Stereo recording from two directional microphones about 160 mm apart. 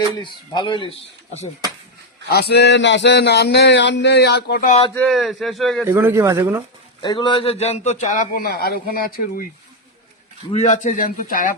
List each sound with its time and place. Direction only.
0.2 s speech: 30° left (ahead or behind)
2.3 s a sound: 90° left
4.9 s speech: centre (ahead or behind)
5.8 s speech: 15° right (ahead or behind)
7.0 s a man's voice: 30° left (ahead or behind); by 9.5 s 65° left (ahead or behind)
10.5 s a man's voice: 45° left (ahead or behind)